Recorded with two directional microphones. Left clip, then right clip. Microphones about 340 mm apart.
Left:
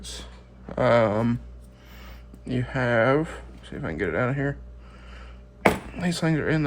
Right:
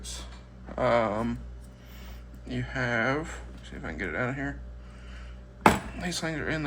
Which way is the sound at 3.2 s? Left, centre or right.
Left.